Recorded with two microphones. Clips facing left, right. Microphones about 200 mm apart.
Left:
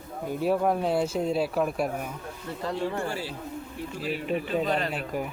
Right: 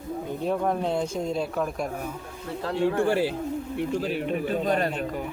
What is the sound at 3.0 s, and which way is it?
Speech, 60° right (ahead or behind).